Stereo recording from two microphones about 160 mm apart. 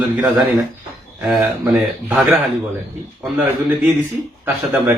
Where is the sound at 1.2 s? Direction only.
5° right (ahead or behind).